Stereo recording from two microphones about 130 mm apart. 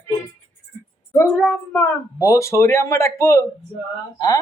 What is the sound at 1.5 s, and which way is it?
A man's voice, 20° left (ahead or behind).